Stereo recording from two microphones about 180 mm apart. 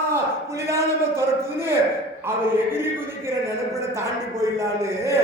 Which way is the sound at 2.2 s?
15° right (ahead or behind).